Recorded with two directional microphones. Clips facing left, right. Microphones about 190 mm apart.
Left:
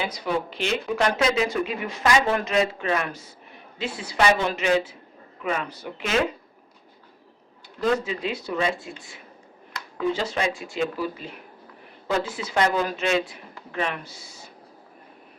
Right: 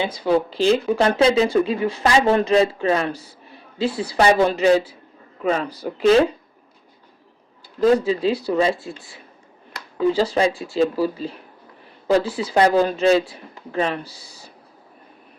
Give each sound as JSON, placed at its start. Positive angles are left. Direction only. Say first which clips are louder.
{"t": 0.0, "sound": "speech", "louder": "right 7 dB", "side_deg": -30}
{"t": 7.8, "sound": "speech", "louder": "right 7 dB", "side_deg": -35}